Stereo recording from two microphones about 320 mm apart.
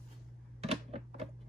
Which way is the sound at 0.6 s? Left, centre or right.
Centre.